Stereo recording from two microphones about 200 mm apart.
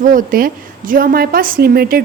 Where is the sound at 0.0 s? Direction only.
40° right (ahead or behind).